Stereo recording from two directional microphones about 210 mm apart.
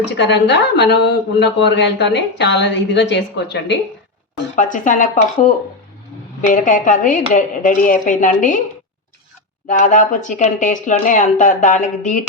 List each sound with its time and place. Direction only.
0.2 s speech: 55° left (ahead or behind)
4.5 s speech: 40° left (ahead or behind)
6.4 s speech: 40° left (ahead or behind)
9.6 s speech: 35° left (ahead or behind)